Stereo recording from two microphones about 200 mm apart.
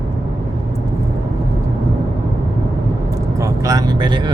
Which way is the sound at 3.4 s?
15° right (ahead or behind).